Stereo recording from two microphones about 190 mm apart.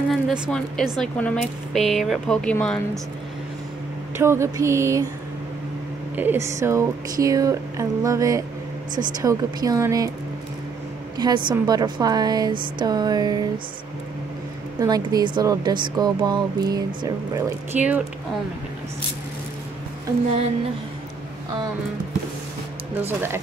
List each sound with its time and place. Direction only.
0.1 s a woman's voice: centre (ahead or behind)
4.2 s speech: 15° right (ahead or behind)
6.1 s speech: 10° right (ahead or behind)
11.1 s speech: 20° right (ahead or behind)
14.8 s speech: 20° right (ahead or behind)
23.0 s speech: 10° right (ahead or behind)